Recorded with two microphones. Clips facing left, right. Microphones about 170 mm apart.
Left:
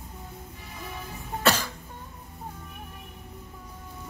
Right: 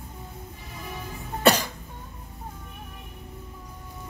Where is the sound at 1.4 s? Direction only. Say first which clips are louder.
Right 4 dB; 15° right (ahead or behind).